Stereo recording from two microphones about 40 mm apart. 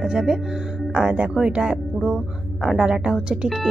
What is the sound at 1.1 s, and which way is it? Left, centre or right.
Speech, right.